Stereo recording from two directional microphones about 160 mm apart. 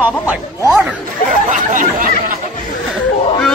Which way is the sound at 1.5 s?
60° right (ahead or behind).